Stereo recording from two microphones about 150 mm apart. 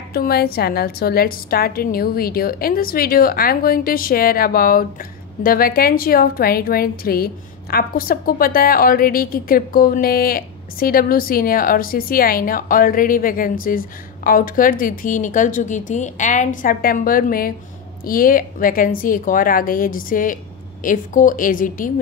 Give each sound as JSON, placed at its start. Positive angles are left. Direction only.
{"t": 0.1, "sound": "a woman's voice", "side_deg": 90}